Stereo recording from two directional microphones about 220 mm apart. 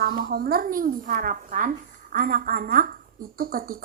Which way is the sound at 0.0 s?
45° right (ahead or behind).